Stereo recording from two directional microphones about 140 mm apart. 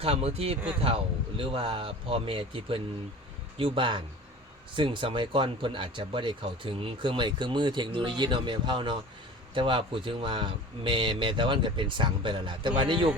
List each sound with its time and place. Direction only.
0.0 s speech: 45° right (ahead or behind)